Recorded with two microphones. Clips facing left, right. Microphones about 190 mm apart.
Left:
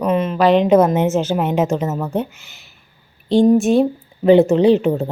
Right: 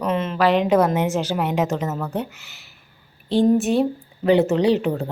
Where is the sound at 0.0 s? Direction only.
15° left (ahead or behind).